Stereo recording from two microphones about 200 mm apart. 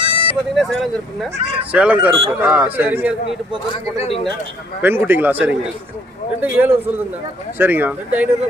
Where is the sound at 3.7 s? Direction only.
30° left (ahead or behind).